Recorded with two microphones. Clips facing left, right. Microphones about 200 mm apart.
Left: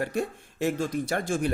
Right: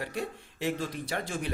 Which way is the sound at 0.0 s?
45° left (ahead or behind).